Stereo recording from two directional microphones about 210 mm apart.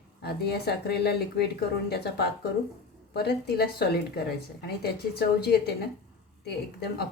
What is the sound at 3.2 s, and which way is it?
A woman's voice, 50° left (ahead or behind).